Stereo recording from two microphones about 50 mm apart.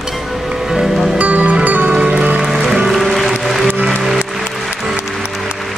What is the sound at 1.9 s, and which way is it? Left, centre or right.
Music, centre.